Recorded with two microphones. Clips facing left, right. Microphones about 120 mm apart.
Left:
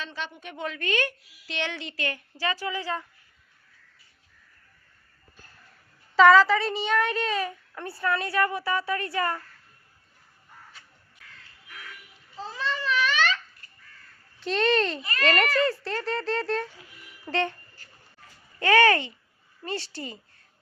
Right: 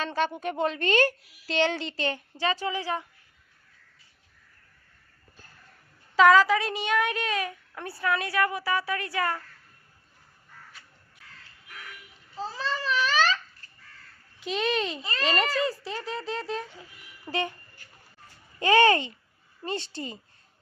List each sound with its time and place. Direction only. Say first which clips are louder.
0.0 s a woman's voice: right 9 dB; 45° right (ahead or behind); by 3.0 s 20° right (ahead or behind)
6.1 s a woman's voice: left 2 dB; 5° right (ahead or behind)
12.4 s babbling: even; 35° right (ahead or behind)
14.3 s a woman's voice: left 4 dB; 5° right (ahead or behind)
17.2 s a sound: left 3 dB; 10° right (ahead or behind)
18.6 s a woman's voice: even; 20° right (ahead or behind)